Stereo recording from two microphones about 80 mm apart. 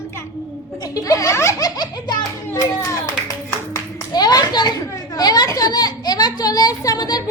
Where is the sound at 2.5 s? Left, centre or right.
Left.